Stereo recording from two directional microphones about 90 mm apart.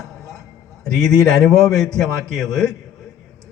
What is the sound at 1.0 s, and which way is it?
Speech, 5° left (ahead or behind).